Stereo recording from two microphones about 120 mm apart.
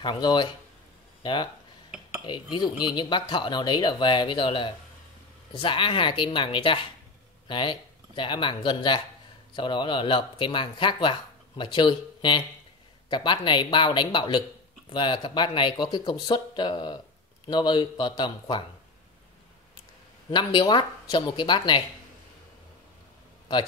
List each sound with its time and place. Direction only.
0.0 s speech: 40° left (ahead or behind)
1.9 s dishes: 10° right (ahead or behind)
2.2 s speech: 40° left (ahead or behind)
20.2 s speech: 40° left (ahead or behind)